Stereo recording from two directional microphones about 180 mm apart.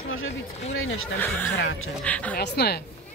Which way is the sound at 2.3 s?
65° left (ahead or behind).